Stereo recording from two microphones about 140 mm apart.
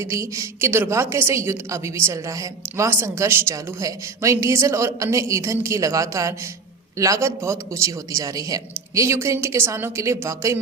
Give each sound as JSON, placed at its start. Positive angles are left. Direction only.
{"t": 0.0, "sound": "a woman's voice", "side_deg": -20}